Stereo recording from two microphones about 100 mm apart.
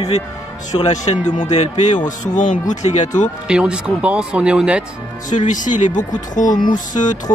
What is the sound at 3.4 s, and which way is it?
Speech, 10° right (ahead or behind).